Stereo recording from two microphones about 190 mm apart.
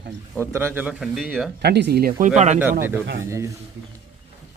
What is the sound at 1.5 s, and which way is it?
Speech, 60° right (ahead or behind).